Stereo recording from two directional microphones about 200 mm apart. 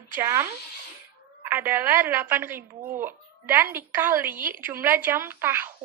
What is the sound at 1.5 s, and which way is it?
A woman's voice, 10° right (ahead or behind).